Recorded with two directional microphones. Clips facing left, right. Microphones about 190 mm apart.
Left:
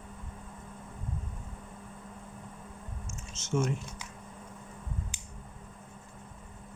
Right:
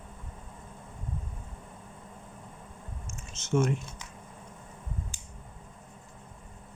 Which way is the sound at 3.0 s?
60° right (ahead or behind).